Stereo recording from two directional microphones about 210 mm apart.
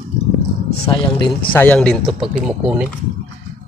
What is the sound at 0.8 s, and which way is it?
Speech, 20° left (ahead or behind).